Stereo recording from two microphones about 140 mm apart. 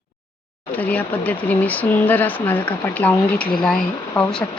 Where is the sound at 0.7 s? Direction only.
10° left (ahead or behind).